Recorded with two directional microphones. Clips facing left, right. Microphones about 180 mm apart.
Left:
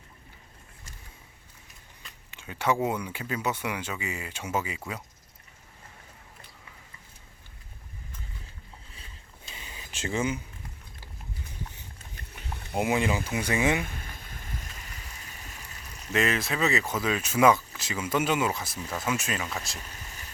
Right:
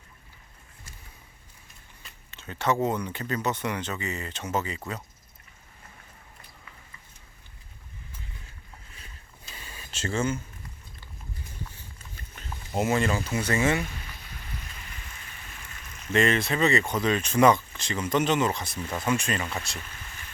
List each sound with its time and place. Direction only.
2.3 s speech: 10° left (ahead or behind)
9.5 s a sound: 20° left (ahead or behind)
11.7 s a sound: 20° left (ahead or behind)
12.7 s speech: 15° left (ahead or behind)
13.8 s boat: 50° left (ahead or behind)
16.1 s speech: centre (ahead or behind)
19.8 s vehicle: 40° left (ahead or behind)